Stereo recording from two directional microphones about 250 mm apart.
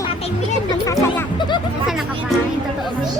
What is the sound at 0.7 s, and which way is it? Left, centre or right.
Speech, centre.